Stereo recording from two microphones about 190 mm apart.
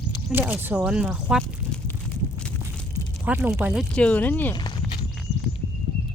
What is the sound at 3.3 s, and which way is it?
Speech, 10° right (ahead or behind).